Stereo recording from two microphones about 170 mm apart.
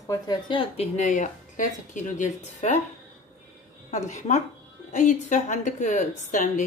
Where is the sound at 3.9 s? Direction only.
45° left (ahead or behind).